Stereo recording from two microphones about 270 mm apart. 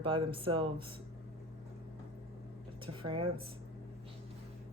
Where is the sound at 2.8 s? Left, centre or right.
Centre.